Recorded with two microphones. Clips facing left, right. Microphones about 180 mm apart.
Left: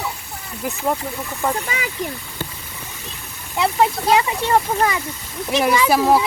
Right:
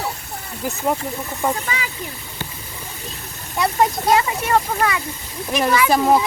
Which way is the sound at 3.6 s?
20° left (ahead or behind).